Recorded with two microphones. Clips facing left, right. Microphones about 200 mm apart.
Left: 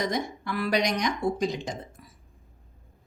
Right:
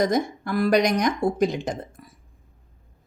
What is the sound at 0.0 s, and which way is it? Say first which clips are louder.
Speech: right 7 dB; 45° right (ahead or behind).